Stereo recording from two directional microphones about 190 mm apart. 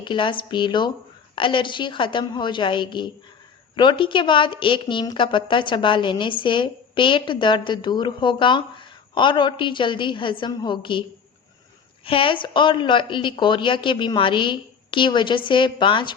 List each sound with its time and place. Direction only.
0.0 s a woman's voice: 25° left (ahead or behind)
12.0 s a woman's voice: 30° left (ahead or behind)